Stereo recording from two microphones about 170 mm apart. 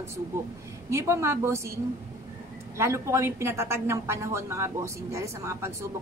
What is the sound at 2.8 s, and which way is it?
A woman's voice, 15° right (ahead or behind).